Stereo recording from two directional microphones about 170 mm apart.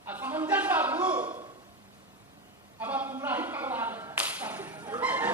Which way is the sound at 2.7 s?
10° right (ahead or behind).